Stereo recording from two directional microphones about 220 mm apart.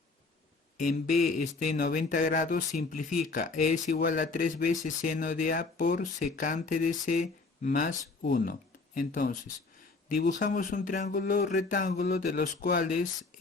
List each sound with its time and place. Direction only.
0.8 s speech: 35° left (ahead or behind)